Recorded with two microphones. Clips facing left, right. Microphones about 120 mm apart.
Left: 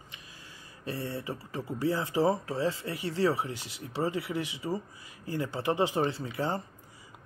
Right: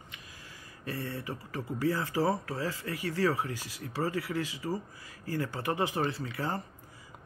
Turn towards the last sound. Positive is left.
turn(degrees=25)  # may be behind; listen again after turning